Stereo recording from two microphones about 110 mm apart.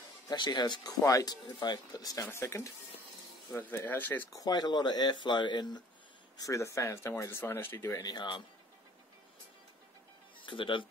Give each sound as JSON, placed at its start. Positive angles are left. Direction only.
{"t": 0.3, "sound": "speech", "side_deg": 40}
{"t": 4.3, "sound": "speech", "side_deg": 35}
{"t": 6.3, "sound": "speech", "side_deg": 30}
{"t": 8.0, "sound": "speech", "side_deg": 40}
{"t": 10.4, "sound": "speech", "side_deg": 50}